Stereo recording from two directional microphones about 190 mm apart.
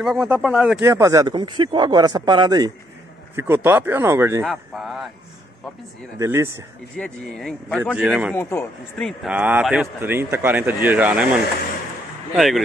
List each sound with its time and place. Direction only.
0.0 s speech: 5° right (ahead or behind)
0.8 s a man's voice: 15° right (ahead or behind)
4.5 s speech: centre (ahead or behind)
6.1 s a man's voice: 15° right (ahead or behind)
7.0 s speech: 5° left (ahead or behind)
8.4 s a man's voice: 10° left (ahead or behind); by 11.2 s 5° right (ahead or behind)
12.4 s speech: centre (ahead or behind)